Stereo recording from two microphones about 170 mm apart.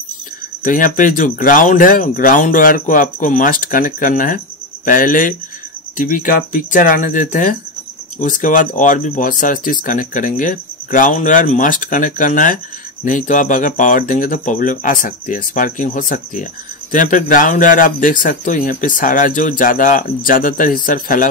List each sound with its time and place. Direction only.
0.7 s speech: 50° left (ahead or behind)